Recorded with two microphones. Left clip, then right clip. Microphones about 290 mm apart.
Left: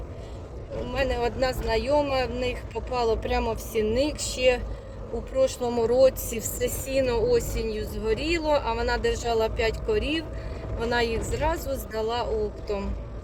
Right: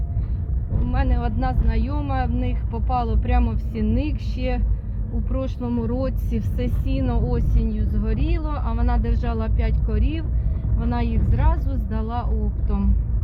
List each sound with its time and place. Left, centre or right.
0.9 s speech: centre
7.5 s speech: centre
8.0 s speech: centre